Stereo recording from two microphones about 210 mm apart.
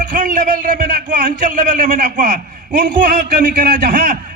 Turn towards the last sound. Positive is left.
turn(degrees=-40)  # may be behind; listen again after turning